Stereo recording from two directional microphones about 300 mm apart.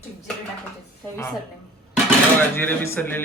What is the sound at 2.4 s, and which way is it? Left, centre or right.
Speech, centre.